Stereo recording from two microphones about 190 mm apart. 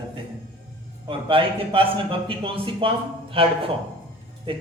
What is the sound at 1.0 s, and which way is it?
A man's voice, 25° right (ahead or behind).